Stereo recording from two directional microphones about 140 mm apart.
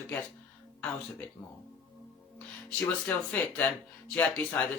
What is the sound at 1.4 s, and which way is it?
Speech, 35° left (ahead or behind).